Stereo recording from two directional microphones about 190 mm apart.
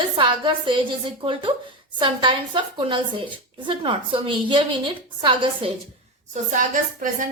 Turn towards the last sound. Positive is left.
turn(degrees=-45)  # may be behind; listen again after turning